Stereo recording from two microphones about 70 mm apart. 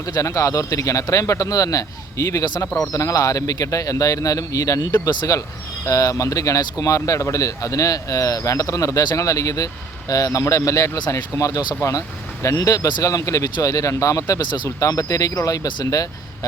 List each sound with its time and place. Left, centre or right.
0.2 s a man's voice: left